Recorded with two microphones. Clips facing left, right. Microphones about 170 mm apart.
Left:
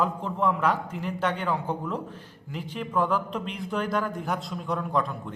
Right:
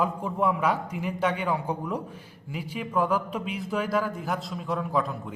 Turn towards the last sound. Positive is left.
turn(degrees=-5)  # may be behind; listen again after turning